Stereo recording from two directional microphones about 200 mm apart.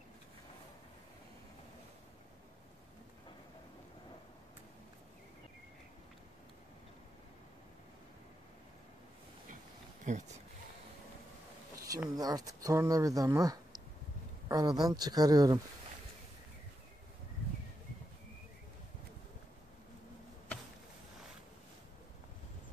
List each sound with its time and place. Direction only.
10.0 s speech: 35° right (ahead or behind)
11.9 s speech: 20° right (ahead or behind)